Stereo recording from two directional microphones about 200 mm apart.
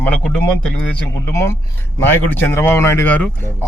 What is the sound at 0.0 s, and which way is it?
A man's voice, 5° left (ahead or behind).